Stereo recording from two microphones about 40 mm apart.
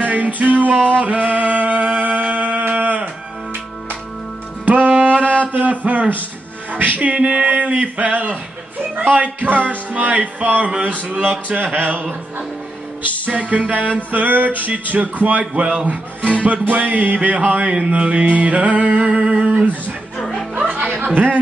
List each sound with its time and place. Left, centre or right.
0.0 s music: right
4.6 s music: right
4.9 s a sound: right
5.9 s speech: right
9.2 s music: right
9.9 s speech: right
11.0 s music: right
13.3 s music: right
14.9 s speech: right
19.5 s music: right
20.2 s music: centre
21.0 s speech: right